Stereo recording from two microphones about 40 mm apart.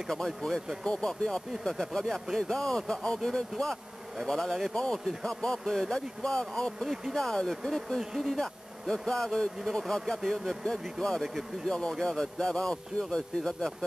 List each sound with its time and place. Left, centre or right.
0.1 s speech: centre
5.2 s speech: centre
6.8 s speech: centre
7.2 s speech: centre